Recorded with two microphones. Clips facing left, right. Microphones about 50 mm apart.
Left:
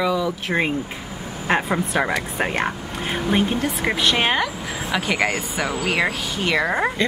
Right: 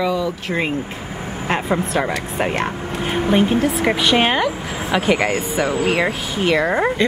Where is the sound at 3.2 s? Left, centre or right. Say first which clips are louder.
Right 5 dB; centre.